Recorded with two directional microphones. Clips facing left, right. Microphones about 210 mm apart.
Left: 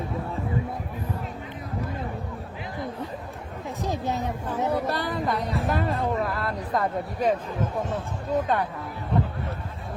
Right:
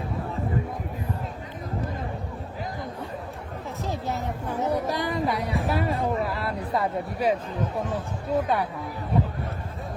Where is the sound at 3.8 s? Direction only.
15° left (ahead or behind).